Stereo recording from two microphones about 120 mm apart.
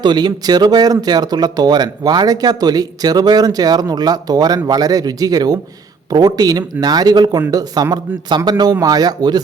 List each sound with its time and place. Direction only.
0.0 s speech: 40° right (ahead or behind)